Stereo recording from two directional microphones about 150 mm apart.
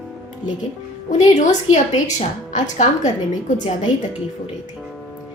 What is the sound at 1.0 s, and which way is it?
A woman's voice, 55° left (ahead or behind).